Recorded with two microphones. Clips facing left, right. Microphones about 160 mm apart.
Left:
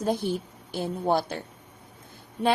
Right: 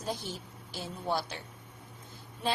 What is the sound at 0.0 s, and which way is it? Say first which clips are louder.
A woman's voice: left 11 dB; 55° left (ahead or behind).